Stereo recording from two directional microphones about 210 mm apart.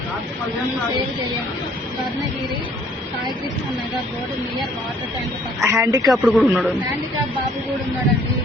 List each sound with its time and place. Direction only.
5.6 s speech: 15° right (ahead or behind)
6.1 s speech: centre (ahead or behind)